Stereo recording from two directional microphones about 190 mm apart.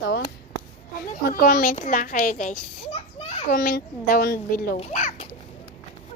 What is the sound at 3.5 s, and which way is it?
A child's voice, 50° left (ahead or behind).